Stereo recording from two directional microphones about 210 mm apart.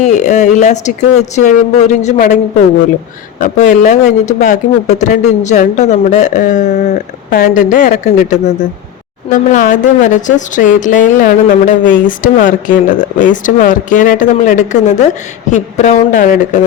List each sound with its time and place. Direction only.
0.0 s a woman's voice: 35° left (ahead or behind)